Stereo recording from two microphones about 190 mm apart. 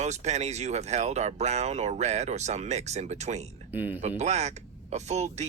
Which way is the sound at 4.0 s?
35° right (ahead or behind).